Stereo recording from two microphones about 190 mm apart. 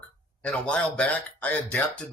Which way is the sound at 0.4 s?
5° left (ahead or behind).